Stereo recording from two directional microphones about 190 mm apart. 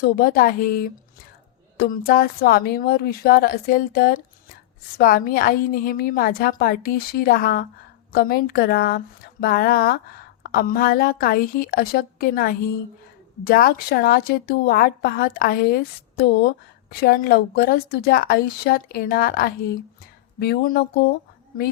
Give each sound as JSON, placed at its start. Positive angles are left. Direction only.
{"t": 0.0, "sound": "a woman's voice", "side_deg": 50}